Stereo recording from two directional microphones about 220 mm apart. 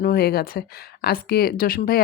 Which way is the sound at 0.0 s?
45° left (ahead or behind).